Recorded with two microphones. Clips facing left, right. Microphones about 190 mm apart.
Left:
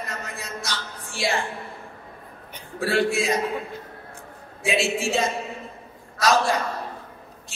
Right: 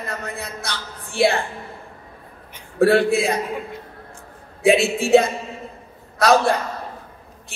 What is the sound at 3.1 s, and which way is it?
Speech, 60° right (ahead or behind).